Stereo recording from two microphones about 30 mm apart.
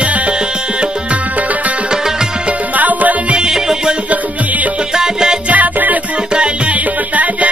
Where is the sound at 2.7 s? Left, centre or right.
Right.